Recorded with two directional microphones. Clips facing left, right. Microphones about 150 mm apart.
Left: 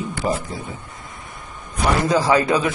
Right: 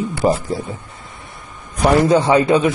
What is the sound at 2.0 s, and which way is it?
Speech, 30° right (ahead or behind).